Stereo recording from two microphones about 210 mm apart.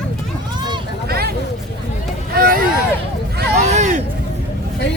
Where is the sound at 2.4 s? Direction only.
45° right (ahead or behind).